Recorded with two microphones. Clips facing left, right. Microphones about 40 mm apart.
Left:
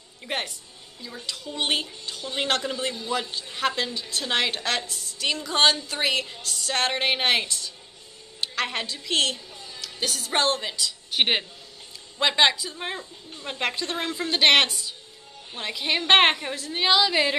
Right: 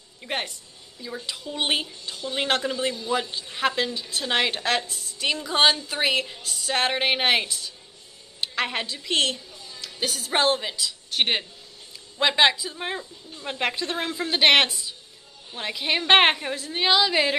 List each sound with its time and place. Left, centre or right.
0.2 s a woman's voice: centre
1.0 s a woman's voice: centre
11.1 s speech: centre
12.2 s a woman's voice: centre